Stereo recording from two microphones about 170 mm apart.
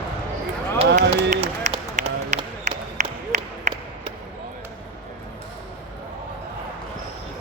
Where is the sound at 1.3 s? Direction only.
40° right (ahead or behind).